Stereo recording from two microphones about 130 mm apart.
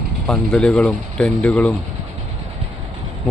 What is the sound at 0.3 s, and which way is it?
Speech, 5° left (ahead or behind).